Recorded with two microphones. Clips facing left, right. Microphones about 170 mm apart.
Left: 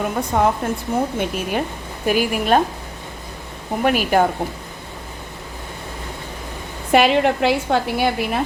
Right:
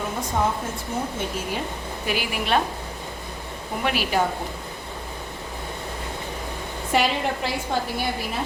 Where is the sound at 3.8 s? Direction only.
45° left (ahead or behind).